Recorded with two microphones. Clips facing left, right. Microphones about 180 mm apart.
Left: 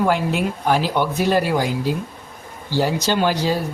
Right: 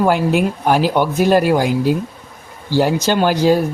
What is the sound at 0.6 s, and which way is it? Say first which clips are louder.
Speech: right 2 dB; 50° right (ahead or behind).